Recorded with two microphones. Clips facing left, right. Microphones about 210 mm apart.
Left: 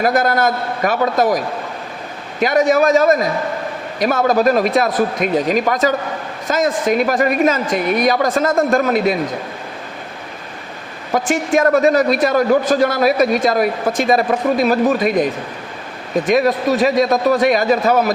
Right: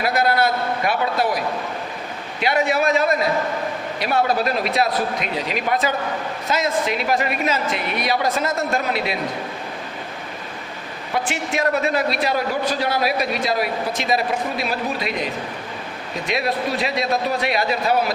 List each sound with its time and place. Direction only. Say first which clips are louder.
0.0 s a man's voice: left 4 dB; 45° left (ahead or behind)
2.4 s a man's voice: left 6 dB; 45° left (ahead or behind)
11.1 s a man's voice: left 8 dB; 45° left (ahead or behind)